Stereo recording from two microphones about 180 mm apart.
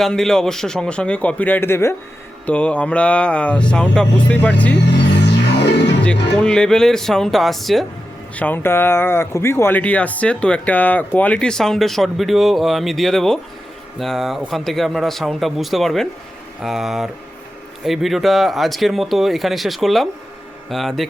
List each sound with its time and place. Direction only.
0.0 s speech: 5° left (ahead or behind)
4.9 s music: 75° left (ahead or behind)
6.4 s speech: 5° left (ahead or behind)
8.4 s speech: 10° left (ahead or behind)